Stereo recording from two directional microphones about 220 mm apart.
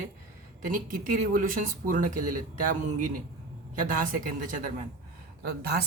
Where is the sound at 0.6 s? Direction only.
40° right (ahead or behind).